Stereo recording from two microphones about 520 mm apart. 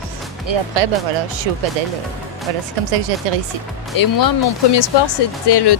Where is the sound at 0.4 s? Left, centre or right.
Right.